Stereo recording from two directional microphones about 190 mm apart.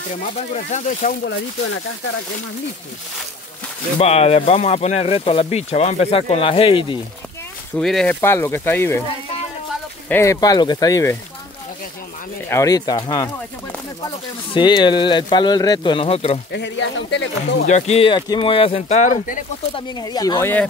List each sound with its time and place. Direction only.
0.6 s speech: 40° left (ahead or behind)
1.2 s speech: 85° left
4.0 s speech: 35° left (ahead or behind)
7.7 s speech: 5° left (ahead or behind)
10.0 s speech: 15° left (ahead or behind)
12.4 s speech: 15° left (ahead or behind)
16.5 s speech: 70° left (ahead or behind)
17.6 s speech: 35° left (ahead or behind)
19.9 s speech: 20° left (ahead or behind)